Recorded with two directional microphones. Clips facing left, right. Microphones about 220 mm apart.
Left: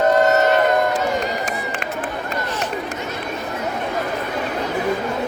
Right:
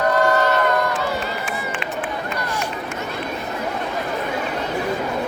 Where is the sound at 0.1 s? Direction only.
20° left (ahead or behind).